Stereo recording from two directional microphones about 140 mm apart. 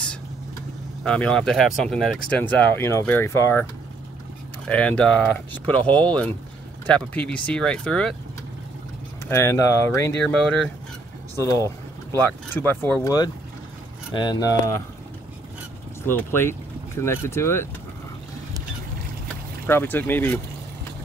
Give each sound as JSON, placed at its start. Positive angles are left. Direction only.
{"t": 1.0, "sound": "speech", "side_deg": 5}
{"t": 4.6, "sound": "speech", "side_deg": 10}
{"t": 9.3, "sound": "speech", "side_deg": 20}
{"t": 11.5, "sound": "speech", "side_deg": 20}
{"t": 13.0, "sound": "speech", "side_deg": 25}
{"t": 16.1, "sound": "speech", "side_deg": 15}
{"t": 19.6, "sound": "speech", "side_deg": 15}